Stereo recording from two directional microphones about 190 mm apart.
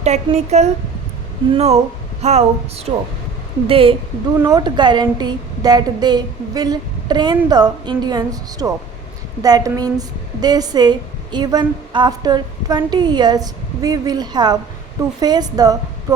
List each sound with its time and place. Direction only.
0.0 s a woman's voice: 35° right (ahead or behind); by 16.1 s 20° right (ahead or behind)